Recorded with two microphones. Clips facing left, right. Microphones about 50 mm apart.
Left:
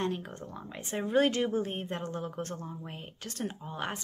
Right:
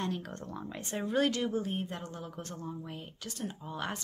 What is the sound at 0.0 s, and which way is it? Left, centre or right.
Speech, left.